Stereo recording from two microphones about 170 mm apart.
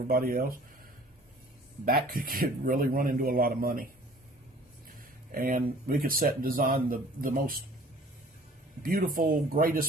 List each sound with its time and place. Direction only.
0.1 s a man's voice: 60° right (ahead or behind)
1.8 s a man's voice: 60° right (ahead or behind)
5.3 s a man's voice: 55° right (ahead or behind)
8.8 s a man's voice: 55° right (ahead or behind)